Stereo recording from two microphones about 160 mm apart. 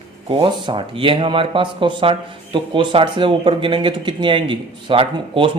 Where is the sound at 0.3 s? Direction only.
30° right (ahead or behind).